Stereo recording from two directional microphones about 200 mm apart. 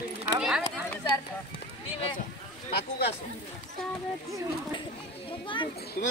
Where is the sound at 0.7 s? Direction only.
20° left (ahead or behind).